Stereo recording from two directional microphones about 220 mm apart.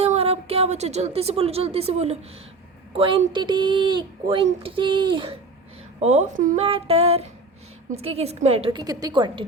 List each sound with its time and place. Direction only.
0.0 s a woman's voice: 25° right (ahead or behind)